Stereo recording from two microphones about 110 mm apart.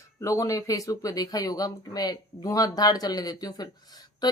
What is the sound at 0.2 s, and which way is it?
Speech, 30° left (ahead or behind).